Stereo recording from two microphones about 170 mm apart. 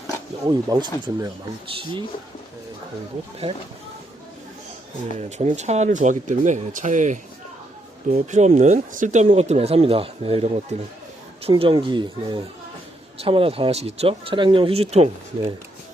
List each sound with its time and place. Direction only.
0.4 s speech: 25° right (ahead or behind)
3.4 s speech: 35° right (ahead or behind)
5.1 s speech: 45° right (ahead or behind)